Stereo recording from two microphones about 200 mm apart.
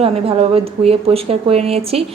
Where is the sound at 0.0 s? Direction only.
30° right (ahead or behind).